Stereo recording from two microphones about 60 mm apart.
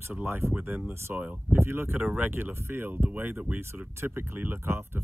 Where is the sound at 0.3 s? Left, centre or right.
Right.